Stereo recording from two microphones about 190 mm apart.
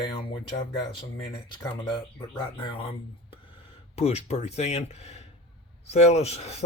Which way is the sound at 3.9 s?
35° left (ahead or behind).